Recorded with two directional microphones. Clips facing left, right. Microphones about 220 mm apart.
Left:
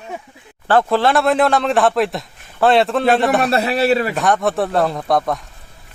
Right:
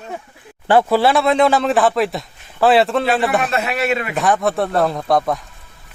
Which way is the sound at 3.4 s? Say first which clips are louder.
Left 4 dB; 35° left (ahead or behind).